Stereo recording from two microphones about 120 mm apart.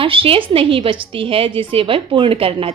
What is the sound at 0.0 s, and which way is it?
A woman's voice, 50° right (ahead or behind).